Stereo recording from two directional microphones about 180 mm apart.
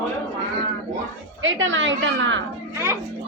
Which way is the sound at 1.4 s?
90° right.